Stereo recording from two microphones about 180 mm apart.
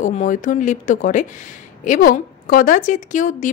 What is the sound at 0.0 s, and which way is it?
A woman's voice, 45° left (ahead or behind).